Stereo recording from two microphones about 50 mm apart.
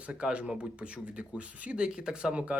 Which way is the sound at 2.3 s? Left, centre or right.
Right.